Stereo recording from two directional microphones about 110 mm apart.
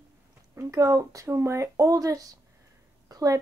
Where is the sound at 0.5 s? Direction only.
30° right (ahead or behind).